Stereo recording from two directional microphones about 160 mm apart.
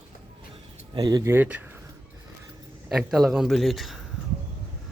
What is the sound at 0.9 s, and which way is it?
Speech, 25° right (ahead or behind).